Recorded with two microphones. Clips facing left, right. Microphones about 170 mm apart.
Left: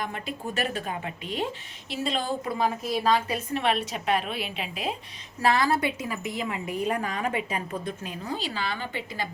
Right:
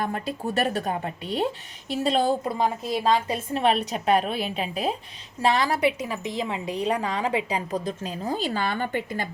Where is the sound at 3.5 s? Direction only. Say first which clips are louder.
Right 4 dB; 35° right (ahead or behind).